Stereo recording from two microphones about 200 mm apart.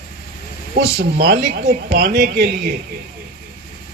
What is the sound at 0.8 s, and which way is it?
Speech, 50° right (ahead or behind).